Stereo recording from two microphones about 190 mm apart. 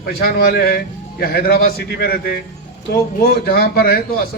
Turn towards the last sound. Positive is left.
turn(degrees=55)  # may be behind; listen again after turning